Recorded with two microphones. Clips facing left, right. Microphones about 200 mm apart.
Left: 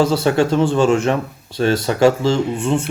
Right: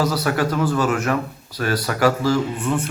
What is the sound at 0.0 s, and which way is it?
Speech, 25° left (ahead or behind).